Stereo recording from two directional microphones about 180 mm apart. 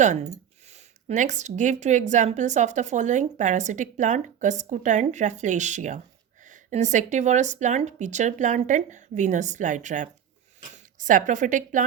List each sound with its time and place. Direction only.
0.7 s a woman's voice: 40° right (ahead or behind)